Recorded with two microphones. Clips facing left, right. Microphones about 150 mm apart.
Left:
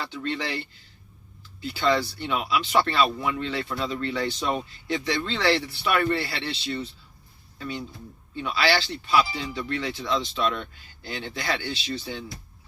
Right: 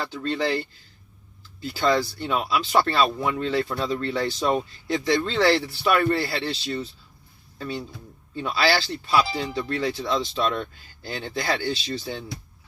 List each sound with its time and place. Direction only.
0.0 s speech: 35° right (ahead or behind)
8.4 s speech: 40° right (ahead or behind)